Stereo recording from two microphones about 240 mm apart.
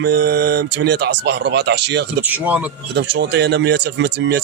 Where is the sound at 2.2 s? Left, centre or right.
Centre.